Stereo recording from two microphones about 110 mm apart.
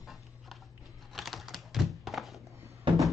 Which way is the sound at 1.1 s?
Centre (ahead or behind).